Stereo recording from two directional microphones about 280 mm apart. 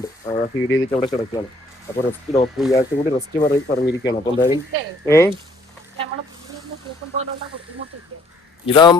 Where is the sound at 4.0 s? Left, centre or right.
Centre.